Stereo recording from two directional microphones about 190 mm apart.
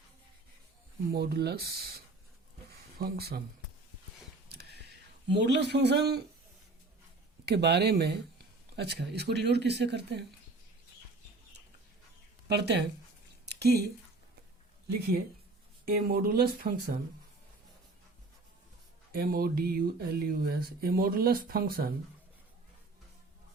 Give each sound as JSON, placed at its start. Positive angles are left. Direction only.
{"t": 1.1, "sound": "speech", "side_deg": -55}
{"t": 2.6, "sound": "a sound", "side_deg": -55}
{"t": 4.4, "sound": "a sound", "side_deg": -60}
{"t": 5.3, "sound": "speech", "side_deg": -65}
{"t": 7.4, "sound": "speech", "side_deg": -60}
{"t": 12.5, "sound": "speech", "side_deg": -60}
{"t": 13.4, "sound": "a sound", "side_deg": -60}
{"t": 15.9, "sound": "speech", "side_deg": -55}
{"t": 19.1, "sound": "speech", "side_deg": -55}